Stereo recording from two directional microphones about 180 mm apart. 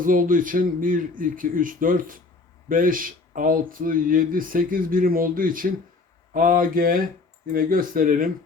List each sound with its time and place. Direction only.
0.0 s speech: 50° right (ahead or behind)